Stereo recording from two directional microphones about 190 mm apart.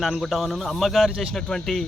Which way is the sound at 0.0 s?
Centre (ahead or behind).